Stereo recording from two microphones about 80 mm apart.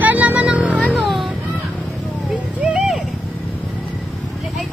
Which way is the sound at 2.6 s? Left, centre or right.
Centre.